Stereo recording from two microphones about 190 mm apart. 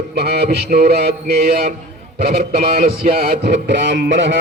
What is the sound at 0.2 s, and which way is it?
Mantra, 60° right (ahead or behind).